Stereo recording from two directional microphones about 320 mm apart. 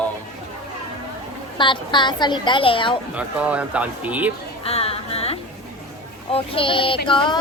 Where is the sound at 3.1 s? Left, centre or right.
Centre.